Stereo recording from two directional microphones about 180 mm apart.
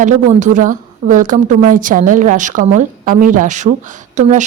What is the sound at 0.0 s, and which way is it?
A woman's voice, 40° right (ahead or behind).